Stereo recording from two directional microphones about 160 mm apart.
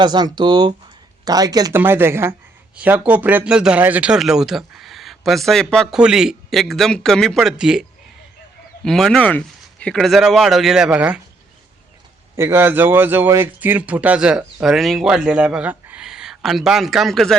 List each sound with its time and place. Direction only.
0.0 s speech: 25° right (ahead or behind); by 11.2 s 10° right (ahead or behind)
12.4 s speech: 15° right (ahead or behind); by 17.3 s centre (ahead or behind)